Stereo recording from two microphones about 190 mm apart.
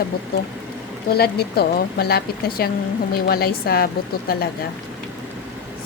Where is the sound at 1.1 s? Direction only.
55° left (ahead or behind).